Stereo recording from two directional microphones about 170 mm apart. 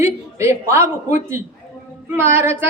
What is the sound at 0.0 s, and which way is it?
A man's voice, 15° right (ahead or behind).